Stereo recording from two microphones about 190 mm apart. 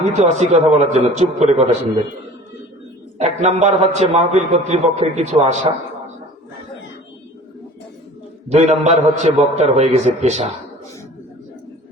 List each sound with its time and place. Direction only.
0.0 s a man's voice: 35° right (ahead or behind)
3.2 s a man's voice: 35° right (ahead or behind)
8.4 s a man's voice: 35° right (ahead or behind)